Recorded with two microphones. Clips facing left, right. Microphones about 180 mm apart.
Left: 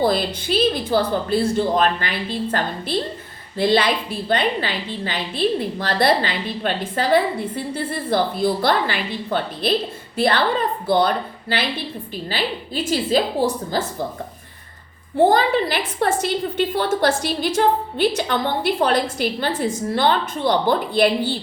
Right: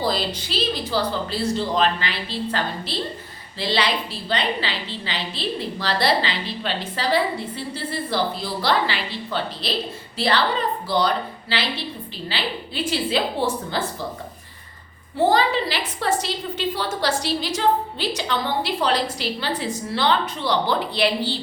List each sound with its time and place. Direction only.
0.0 s a woman's voice: 55° left (ahead or behind)
15.3 s a woman's voice: 50° left (ahead or behind)